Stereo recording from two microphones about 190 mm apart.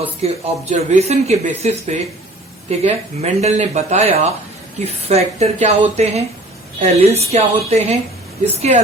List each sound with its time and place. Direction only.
0.2 s speech: 35° right (ahead or behind)